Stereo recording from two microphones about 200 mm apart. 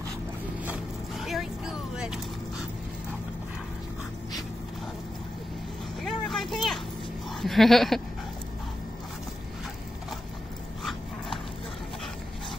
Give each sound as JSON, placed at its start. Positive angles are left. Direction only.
{"t": 0.7, "sound": "vehicle", "side_deg": 0}
{"t": 6.0, "sound": "vehicle", "side_deg": 0}
{"t": 7.4, "sound": "sheep", "side_deg": 0}
{"t": 10.8, "sound": "dog", "side_deg": 0}